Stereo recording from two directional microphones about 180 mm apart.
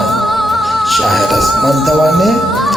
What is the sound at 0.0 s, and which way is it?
Music, centre (ahead or behind).